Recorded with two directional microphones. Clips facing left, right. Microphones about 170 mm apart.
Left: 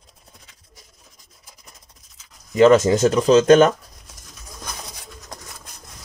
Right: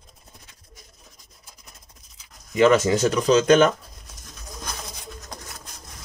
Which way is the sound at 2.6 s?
35° left (ahead or behind).